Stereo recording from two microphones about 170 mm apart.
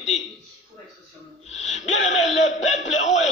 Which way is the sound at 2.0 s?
45° left (ahead or behind).